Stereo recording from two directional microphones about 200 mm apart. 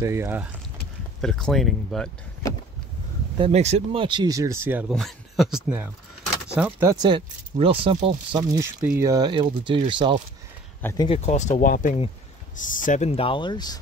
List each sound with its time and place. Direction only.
0.0 s speech: 15° right (ahead or behind)
1.2 s speech: centre (ahead or behind)
3.3 s speech: 30° right (ahead or behind)
10.8 s speech: 10° left (ahead or behind)
11.1 s speech: 35° left (ahead or behind)